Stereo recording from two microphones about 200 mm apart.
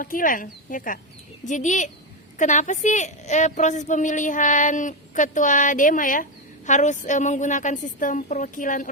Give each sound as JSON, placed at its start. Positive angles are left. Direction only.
{"t": 0.0, "sound": "a woman's voice", "side_deg": 45}